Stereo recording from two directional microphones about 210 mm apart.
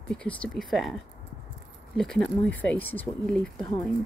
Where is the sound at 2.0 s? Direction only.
5° left (ahead or behind).